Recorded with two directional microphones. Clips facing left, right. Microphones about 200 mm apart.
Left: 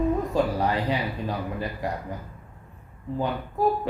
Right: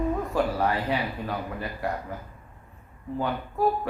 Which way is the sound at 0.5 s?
15° left (ahead or behind).